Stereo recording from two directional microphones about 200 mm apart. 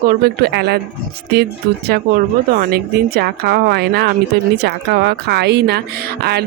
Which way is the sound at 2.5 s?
50° right (ahead or behind).